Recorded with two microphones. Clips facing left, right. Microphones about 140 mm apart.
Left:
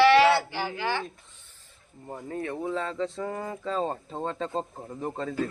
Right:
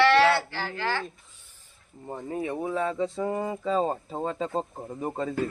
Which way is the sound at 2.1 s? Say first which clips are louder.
Right 2 dB; 20° right (ahead or behind).